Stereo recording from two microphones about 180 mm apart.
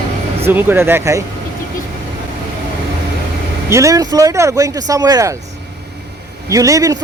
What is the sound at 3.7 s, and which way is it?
Speech, 20° right (ahead or behind).